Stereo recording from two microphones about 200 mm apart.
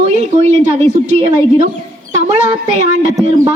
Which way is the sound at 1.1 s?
35° right (ahead or behind).